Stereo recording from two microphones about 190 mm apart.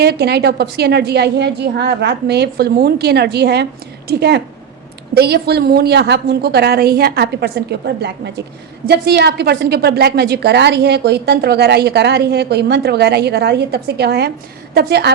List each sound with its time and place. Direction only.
0.0 s a woman's voice: 60° right (ahead or behind)